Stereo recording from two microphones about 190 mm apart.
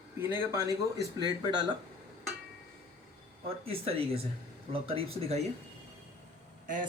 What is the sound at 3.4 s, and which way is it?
Speech, 30° right (ahead or behind).